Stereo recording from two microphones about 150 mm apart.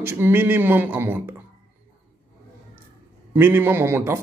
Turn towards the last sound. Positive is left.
turn(degrees=-15)  # may be behind; listen again after turning